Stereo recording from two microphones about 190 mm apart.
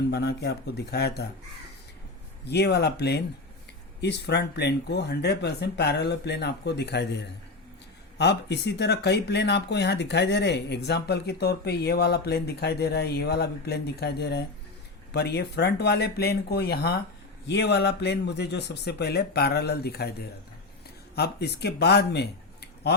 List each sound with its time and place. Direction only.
0.1 s speech: 60° left (ahead or behind)
2.4 s speech: 60° left (ahead or behind)
21.2 s speech: 60° left (ahead or behind)